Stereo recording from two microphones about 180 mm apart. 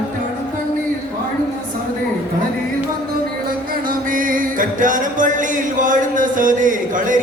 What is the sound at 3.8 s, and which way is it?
Music, 50° right (ahead or behind).